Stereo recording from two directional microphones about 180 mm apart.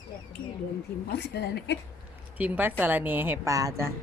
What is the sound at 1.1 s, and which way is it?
Speech, 70° left (ahead or behind).